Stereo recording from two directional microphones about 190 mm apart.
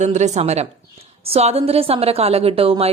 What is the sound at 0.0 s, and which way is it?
A woman's voice, 35° right (ahead or behind).